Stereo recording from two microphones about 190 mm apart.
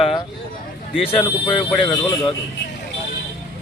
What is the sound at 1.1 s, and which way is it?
Speech, 30° left (ahead or behind).